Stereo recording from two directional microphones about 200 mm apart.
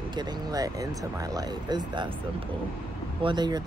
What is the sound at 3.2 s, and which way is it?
Speech, 20° right (ahead or behind).